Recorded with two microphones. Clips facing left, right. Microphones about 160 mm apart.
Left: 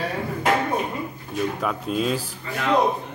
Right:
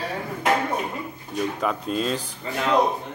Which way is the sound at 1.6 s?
5° left (ahead or behind).